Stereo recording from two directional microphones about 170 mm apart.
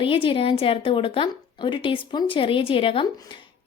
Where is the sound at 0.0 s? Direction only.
30° left (ahead or behind).